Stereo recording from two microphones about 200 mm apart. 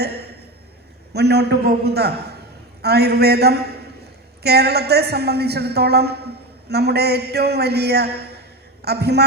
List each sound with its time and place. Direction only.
1.1 s a man's voice: 55° right (ahead or behind)